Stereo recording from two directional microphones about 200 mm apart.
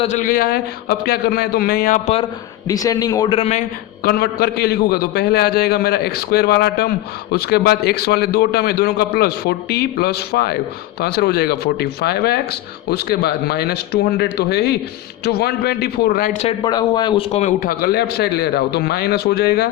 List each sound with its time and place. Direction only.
0.0 s a man's voice: 40° left (ahead or behind)
2.6 s a man's voice: 15° left (ahead or behind)
4.0 s a man's voice: 55° left (ahead or behind)
16.5 s a man's voice: 20° left (ahead or behind)
17.3 s a man's voice: 40° left (ahead or behind)